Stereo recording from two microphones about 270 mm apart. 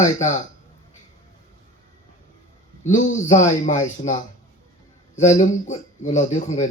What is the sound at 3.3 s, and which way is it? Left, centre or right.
Speech, left.